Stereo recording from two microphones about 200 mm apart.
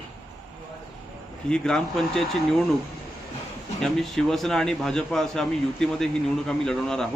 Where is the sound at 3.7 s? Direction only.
Centre (ahead or behind).